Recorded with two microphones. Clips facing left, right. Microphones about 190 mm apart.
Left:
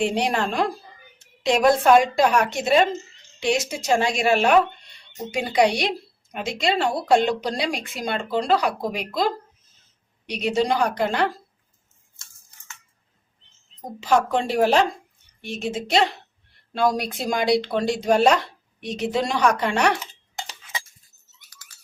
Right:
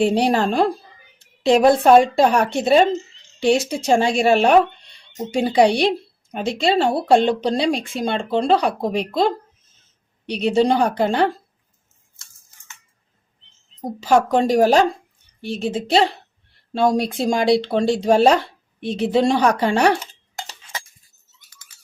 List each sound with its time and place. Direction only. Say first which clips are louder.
0.0 s speech: right 5 dB; 35° right (ahead or behind)
14.0 s speech: right 4 dB; 40° right (ahead or behind)